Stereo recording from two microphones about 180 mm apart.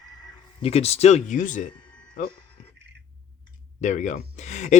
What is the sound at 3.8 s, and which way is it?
Speech, 45° left (ahead or behind).